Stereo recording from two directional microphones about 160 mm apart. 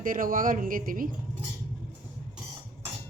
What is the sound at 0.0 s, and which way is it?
Speech, 60° right (ahead or behind).